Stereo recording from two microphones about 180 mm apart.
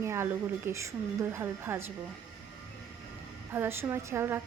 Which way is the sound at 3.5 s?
15° right (ahead or behind).